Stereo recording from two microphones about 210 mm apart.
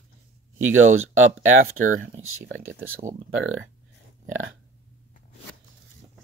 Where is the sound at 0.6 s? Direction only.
70° right (ahead or behind).